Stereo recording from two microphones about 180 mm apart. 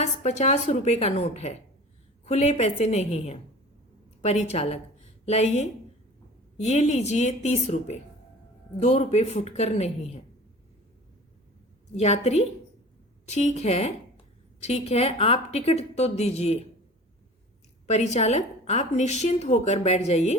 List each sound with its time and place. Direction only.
0.0 s a woman's voice: 40° left (ahead or behind)
11.9 s a woman's voice: 35° left (ahead or behind)
17.8 s a woman's voice: 40° left (ahead or behind)